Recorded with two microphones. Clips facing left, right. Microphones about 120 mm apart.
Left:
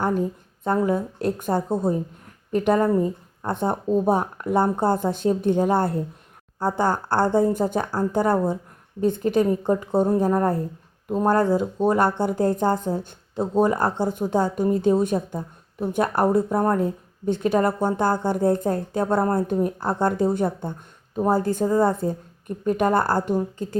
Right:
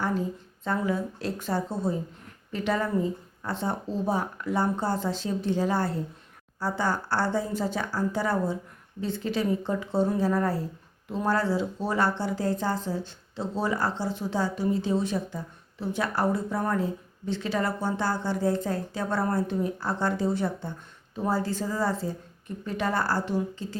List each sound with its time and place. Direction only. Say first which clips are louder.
0.0 s a woman's voice: left 5 dB; 50° left (ahead or behind)